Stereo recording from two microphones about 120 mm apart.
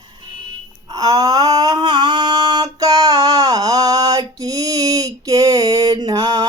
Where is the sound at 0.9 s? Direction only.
30° right (ahead or behind).